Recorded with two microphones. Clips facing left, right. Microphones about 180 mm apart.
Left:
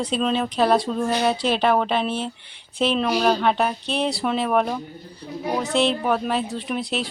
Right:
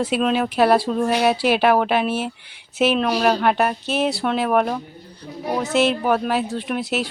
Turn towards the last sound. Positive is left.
turn(degrees=0)  # may be behind; listen again after turning